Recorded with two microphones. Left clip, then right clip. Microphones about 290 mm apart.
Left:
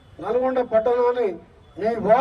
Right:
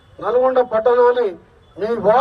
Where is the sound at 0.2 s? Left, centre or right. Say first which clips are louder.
Right 6 dB; centre.